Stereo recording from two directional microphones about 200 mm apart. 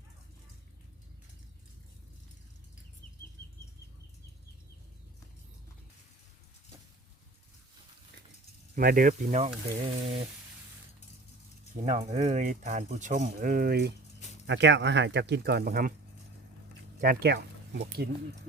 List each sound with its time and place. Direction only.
8.7 s speech: 45° right (ahead or behind)
9.6 s speech: 25° right (ahead or behind)
11.8 s speech: 35° right (ahead or behind); by 13.9 s 50° right (ahead or behind)
14.4 s speech: 65° right (ahead or behind); by 15.9 s 50° right (ahead or behind)
17.0 s speech: 50° right (ahead or behind)